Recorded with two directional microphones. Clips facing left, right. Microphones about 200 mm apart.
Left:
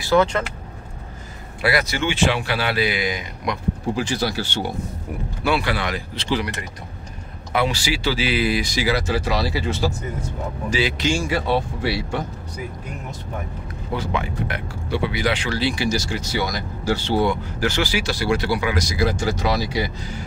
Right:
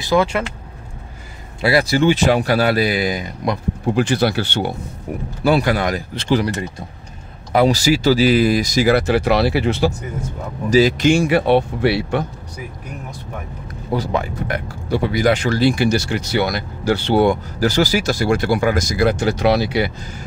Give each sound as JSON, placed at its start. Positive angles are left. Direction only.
{"t": 0.0, "sound": "speech", "side_deg": -10}
{"t": 1.6, "sound": "speech", "side_deg": -30}
{"t": 3.9, "sound": "speech", "side_deg": -60}
{"t": 5.4, "sound": "speech", "side_deg": -40}
{"t": 7.5, "sound": "speech", "side_deg": -40}
{"t": 10.7, "sound": "speech", "side_deg": -40}
{"t": 11.1, "sound": "speech", "side_deg": -60}
{"t": 13.9, "sound": "speech", "side_deg": -40}
{"t": 17.6, "sound": "speech", "side_deg": -40}